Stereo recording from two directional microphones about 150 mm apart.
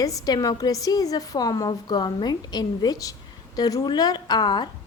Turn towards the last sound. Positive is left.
turn(degrees=30)  # may be behind; listen again after turning